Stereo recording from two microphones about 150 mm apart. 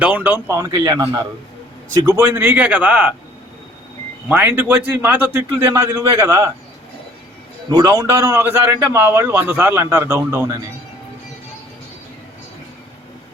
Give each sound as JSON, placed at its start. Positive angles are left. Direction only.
{"t": 0.0, "sound": "a man's voice", "side_deg": -10}
{"t": 4.3, "sound": "a man's voice", "side_deg": -15}
{"t": 7.7, "sound": "a man's voice", "side_deg": -25}